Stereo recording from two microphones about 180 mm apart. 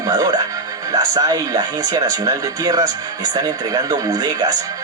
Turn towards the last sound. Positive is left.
turn(degrees=-20)  # may be behind; listen again after turning